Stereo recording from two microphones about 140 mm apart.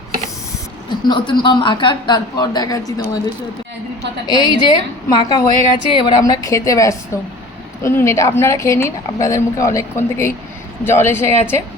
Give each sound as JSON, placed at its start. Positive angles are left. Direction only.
{"t": 1.0, "sound": "a woman's voice", "side_deg": 35}
{"t": 4.3, "sound": "a woman's voice", "side_deg": 30}